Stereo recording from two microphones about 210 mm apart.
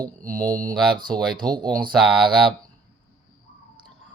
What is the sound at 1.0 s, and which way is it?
Speech, 20° right (ahead or behind).